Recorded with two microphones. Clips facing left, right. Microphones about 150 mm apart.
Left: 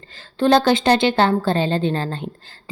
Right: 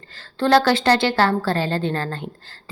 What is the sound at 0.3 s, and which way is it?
A woman's voice, 20° left (ahead or behind).